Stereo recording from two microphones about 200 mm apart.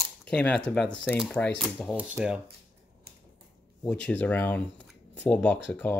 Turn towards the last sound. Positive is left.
turn(degrees=10)  # may be behind; listen again after turning